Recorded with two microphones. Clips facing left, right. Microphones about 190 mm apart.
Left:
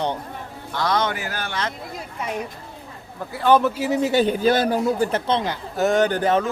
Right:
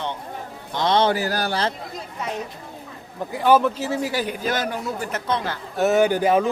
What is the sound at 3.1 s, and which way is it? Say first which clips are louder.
Speech: even; 15° right (ahead or behind).